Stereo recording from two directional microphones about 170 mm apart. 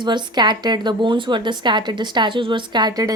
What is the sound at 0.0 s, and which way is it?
A woman's voice, 25° right (ahead or behind).